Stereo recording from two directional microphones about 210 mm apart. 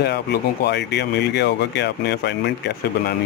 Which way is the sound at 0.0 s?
50° left (ahead or behind).